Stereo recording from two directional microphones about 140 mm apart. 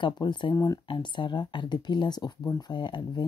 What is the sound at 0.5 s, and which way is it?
Speech, 25° left (ahead or behind).